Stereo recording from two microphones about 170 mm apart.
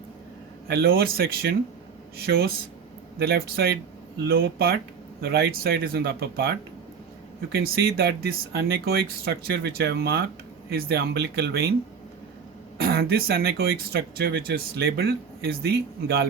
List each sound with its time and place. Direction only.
0.7 s speech: 65° right (ahead or behind)
12.7 s speech: 65° right (ahead or behind)